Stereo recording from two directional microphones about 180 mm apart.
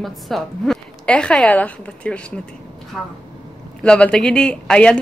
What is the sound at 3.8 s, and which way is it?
A woman's voice, 5° left (ahead or behind).